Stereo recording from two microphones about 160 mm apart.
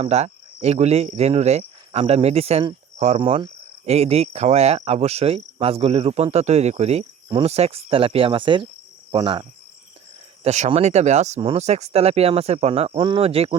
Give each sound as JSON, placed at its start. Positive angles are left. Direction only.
{"t": 0.0, "sound": "cricket", "side_deg": -40}
{"t": 10.4, "sound": "speech", "side_deg": -45}
{"t": 11.3, "sound": "cricket", "side_deg": -40}